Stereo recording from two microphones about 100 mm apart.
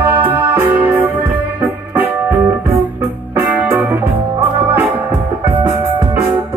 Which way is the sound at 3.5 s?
15° right (ahead or behind).